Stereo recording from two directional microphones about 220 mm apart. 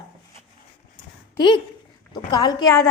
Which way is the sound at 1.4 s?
20° left (ahead or behind).